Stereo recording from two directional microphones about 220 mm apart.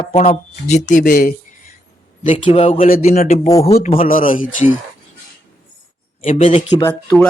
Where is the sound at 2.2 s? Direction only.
25° left (ahead or behind).